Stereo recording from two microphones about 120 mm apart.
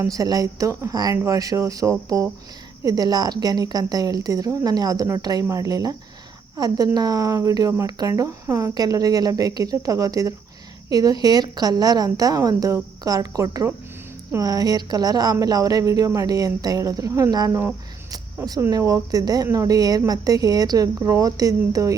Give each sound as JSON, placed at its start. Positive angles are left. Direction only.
{"t": 0.0, "sound": "a woman's voice", "side_deg": -30}
{"t": 18.7, "sound": "a woman's voice", "side_deg": -25}